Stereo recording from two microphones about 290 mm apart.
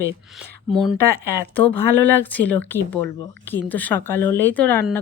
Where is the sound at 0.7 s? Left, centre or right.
Centre.